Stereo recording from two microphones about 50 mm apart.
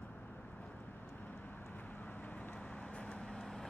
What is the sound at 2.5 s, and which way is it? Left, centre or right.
Vehicle, left.